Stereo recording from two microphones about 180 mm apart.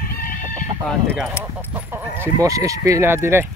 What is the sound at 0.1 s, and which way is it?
Chicken, 55° left (ahead or behind).